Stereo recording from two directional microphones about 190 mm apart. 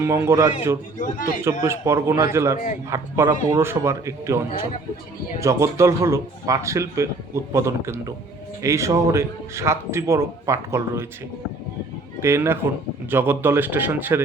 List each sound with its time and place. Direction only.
0.0 s a man's voice: 15° right (ahead or behind)
12.2 s a man's voice: 15° right (ahead or behind)